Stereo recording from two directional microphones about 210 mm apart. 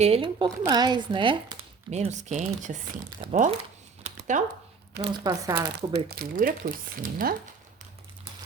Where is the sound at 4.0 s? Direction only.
35° right (ahead or behind).